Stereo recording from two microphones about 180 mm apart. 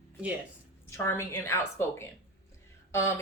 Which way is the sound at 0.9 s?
15° left (ahead or behind).